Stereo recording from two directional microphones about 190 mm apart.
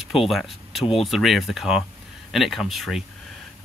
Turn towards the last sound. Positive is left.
turn(degrees=0)  # may be behind; listen again after turning